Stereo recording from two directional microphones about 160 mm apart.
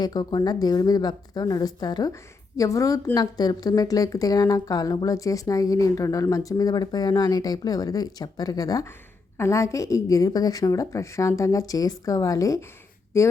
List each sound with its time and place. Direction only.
0.0 s a woman's voice: 25° left (ahead or behind)